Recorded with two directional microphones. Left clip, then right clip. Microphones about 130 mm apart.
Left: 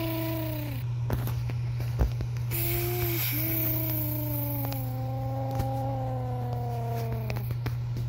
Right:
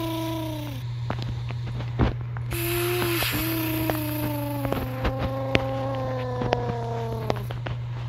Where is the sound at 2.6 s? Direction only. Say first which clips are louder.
Right 7 dB; 25° right (ahead or behind).